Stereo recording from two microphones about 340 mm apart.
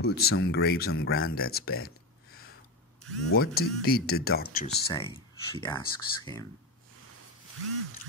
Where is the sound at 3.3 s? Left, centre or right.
Left.